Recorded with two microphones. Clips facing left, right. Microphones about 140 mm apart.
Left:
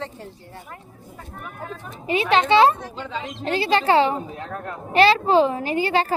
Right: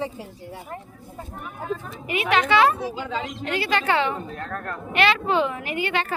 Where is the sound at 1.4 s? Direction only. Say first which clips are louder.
Right 5 dB; centre (ahead or behind).